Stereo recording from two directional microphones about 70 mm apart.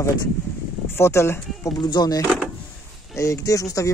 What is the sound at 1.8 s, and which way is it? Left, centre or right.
Speech, left.